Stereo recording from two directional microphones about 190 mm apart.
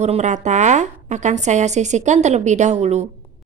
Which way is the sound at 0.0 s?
35° right (ahead or behind).